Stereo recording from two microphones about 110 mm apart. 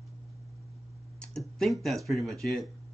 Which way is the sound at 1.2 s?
5° left (ahead or behind).